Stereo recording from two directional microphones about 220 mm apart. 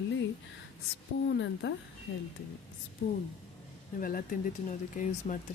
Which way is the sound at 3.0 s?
50° left (ahead or behind).